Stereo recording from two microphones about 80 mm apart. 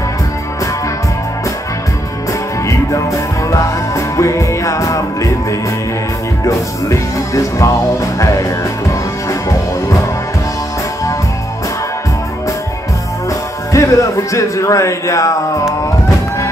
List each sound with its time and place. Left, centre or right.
2.6 s music: left
13.7 s speech: left